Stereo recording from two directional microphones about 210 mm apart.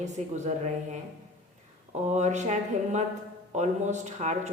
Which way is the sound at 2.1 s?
35° right (ahead or behind).